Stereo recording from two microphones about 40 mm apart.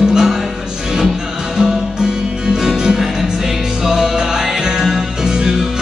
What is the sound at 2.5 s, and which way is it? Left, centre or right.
Music, centre.